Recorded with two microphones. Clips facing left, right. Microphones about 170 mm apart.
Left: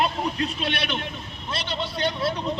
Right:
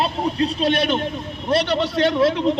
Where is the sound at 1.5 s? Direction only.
70° right (ahead or behind); by 2.5 s 90° right.